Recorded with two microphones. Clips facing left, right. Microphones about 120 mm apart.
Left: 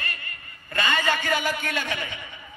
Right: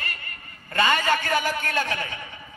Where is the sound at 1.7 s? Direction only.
35° right (ahead or behind).